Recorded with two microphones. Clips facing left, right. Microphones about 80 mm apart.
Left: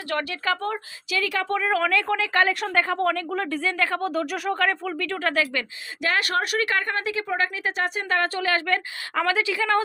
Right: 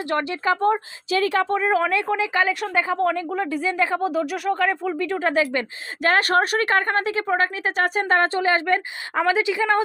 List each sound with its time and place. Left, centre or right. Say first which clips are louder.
0.1 s a woman's voice: right 3 dB; right
2.3 s speech: left 3 dB; centre
5.5 s a woman's voice: right 4 dB; right